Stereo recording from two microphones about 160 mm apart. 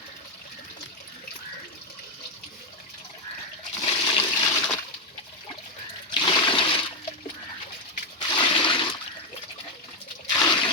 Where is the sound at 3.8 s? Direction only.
25° left (ahead or behind).